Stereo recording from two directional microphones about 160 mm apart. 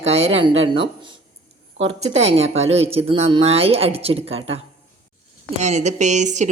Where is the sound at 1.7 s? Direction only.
40° right (ahead or behind).